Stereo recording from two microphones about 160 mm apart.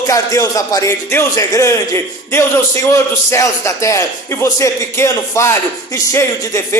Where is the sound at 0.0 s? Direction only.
20° left (ahead or behind).